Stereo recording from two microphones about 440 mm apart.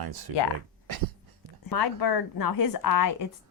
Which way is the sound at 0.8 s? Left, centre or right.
Right.